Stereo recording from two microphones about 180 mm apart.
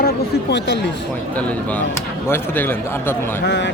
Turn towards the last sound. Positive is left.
turn(degrees=80)